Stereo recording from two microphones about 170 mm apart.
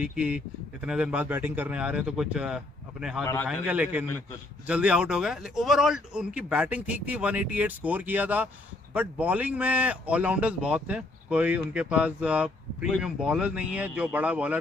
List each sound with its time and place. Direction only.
0.0 s speech: 5° right (ahead or behind)